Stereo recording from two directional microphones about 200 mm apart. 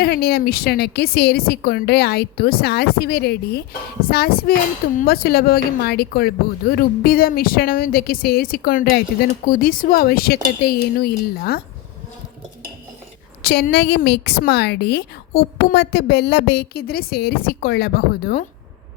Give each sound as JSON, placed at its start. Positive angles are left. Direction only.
{"t": 0.0, "sound": "a woman's voice", "side_deg": 50}
{"t": 13.4, "sound": "a woman's voice", "side_deg": 55}